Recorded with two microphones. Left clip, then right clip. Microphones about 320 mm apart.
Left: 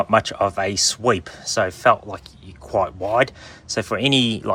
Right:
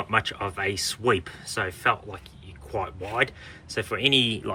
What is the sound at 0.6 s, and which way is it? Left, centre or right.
Speech, left.